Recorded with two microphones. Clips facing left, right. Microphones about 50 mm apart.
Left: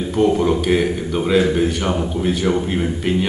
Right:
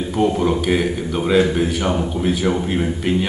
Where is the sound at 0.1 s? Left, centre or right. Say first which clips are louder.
Left 2 dB; centre.